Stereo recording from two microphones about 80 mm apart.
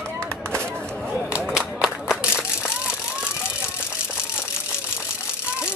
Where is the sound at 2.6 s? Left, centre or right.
Centre.